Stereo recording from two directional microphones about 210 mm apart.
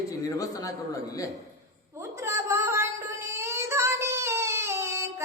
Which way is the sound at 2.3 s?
15° right (ahead or behind).